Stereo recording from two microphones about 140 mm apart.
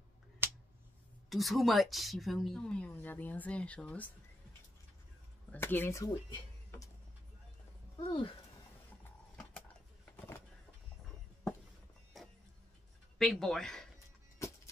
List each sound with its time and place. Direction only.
1.3 s speech: centre (ahead or behind)
5.5 s speech: 15° left (ahead or behind)
8.0 s speech: 35° left (ahead or behind)
10.1 s a sound: 20° left (ahead or behind)
13.2 s speech: centre (ahead or behind)